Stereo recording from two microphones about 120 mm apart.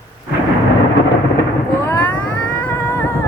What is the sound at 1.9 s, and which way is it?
Cat, 15° left (ahead or behind).